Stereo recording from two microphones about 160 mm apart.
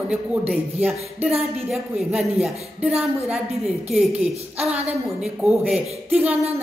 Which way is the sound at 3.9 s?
5° right (ahead or behind).